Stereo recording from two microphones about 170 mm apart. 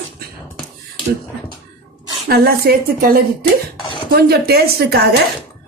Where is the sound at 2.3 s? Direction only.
65° right (ahead or behind).